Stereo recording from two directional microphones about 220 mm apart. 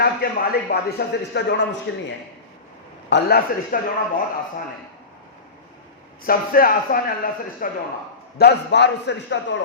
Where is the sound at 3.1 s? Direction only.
50° left (ahead or behind).